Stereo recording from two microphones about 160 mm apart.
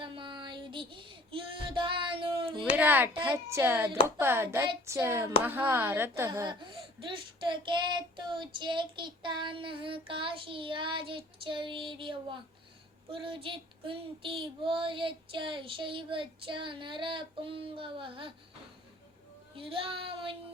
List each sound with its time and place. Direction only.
0.0 s music: 30° right (ahead or behind)
2.7 s speech: 10° right (ahead or behind)
6.5 s child singing: 30° right (ahead or behind)
19.5 s child singing: 35° right (ahead or behind)